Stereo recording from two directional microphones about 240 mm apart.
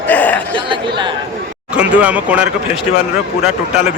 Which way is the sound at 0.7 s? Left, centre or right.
Centre.